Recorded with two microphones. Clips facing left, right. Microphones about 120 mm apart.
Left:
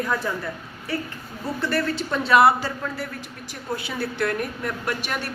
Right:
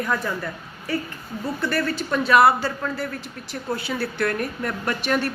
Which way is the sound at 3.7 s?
15° left (ahead or behind).